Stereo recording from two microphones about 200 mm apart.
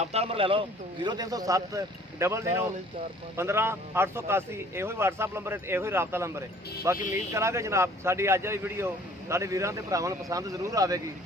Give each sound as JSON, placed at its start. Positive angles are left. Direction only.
{"t": 0.0, "sound": "a man's voice", "side_deg": -30}